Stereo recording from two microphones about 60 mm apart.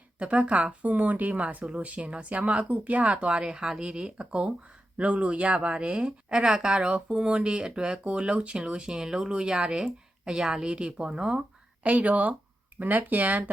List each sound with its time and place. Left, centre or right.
0.2 s speech: right